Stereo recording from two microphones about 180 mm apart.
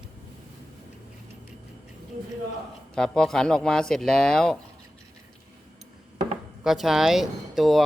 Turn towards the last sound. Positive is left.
turn(degrees=0)  # may be behind; listen again after turning